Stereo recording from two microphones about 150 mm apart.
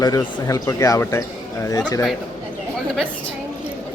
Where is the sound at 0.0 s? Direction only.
25° left (ahead or behind).